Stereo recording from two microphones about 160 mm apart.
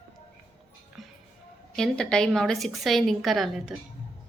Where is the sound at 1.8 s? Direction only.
5° left (ahead or behind).